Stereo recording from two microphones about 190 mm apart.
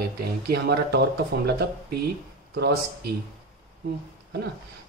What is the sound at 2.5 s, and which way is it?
Speech, 60° right (ahead or behind).